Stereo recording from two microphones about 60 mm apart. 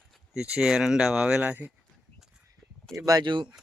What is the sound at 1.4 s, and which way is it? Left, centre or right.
Speech, right.